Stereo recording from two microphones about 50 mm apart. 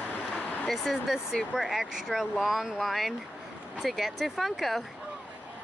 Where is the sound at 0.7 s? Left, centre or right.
Centre.